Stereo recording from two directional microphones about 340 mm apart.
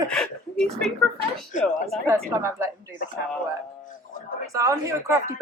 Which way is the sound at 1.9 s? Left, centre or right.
Centre.